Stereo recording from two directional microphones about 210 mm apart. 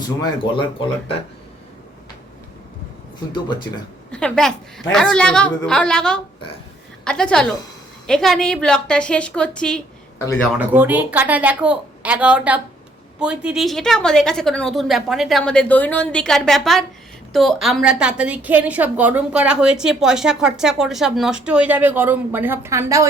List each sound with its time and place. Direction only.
0.2 s speech: 25° left (ahead or behind)
3.3 s speech: 20° left (ahead or behind)
4.1 s a woman's voice: 5° left (ahead or behind)
10.6 s a woman's voice: 10° right (ahead or behind)